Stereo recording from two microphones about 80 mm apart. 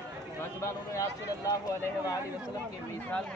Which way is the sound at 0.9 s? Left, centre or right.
Left.